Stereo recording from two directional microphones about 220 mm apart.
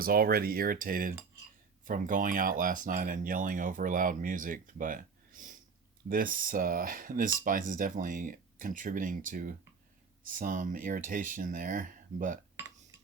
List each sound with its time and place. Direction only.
0.0 s speech: 40° right (ahead or behind)
12.5 s dishes: 10° right (ahead or behind)